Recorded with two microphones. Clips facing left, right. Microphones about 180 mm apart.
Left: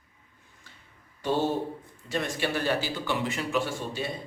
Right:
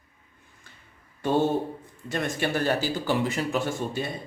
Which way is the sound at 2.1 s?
50° right (ahead or behind).